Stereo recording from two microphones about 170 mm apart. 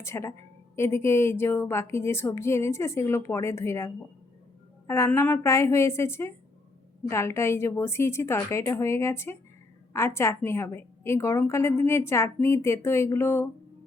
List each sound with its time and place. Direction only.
0.0 s a woman's voice: 15° left (ahead or behind)